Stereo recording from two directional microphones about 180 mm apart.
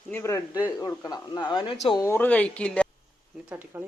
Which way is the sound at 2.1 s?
10° left (ahead or behind).